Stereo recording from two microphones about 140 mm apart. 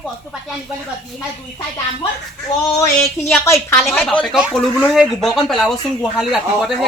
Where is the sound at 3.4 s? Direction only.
20° left (ahead or behind); by 6.9 s centre (ahead or behind).